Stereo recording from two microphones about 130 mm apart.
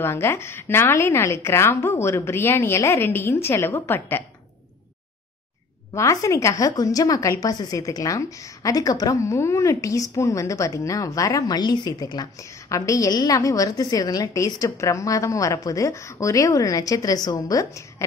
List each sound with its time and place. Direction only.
0.0 s a woman's voice: 20° left (ahead or behind)
5.9 s a woman's voice: 25° left (ahead or behind)